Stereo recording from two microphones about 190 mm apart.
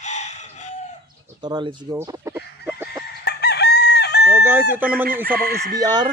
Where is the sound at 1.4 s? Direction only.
25° right (ahead or behind); by 3.0 s 5° right (ahead or behind).